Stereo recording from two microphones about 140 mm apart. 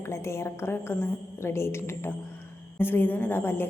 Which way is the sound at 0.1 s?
20° left (ahead or behind).